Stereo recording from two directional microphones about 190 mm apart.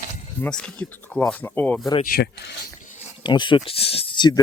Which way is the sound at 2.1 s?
45° left (ahead or behind).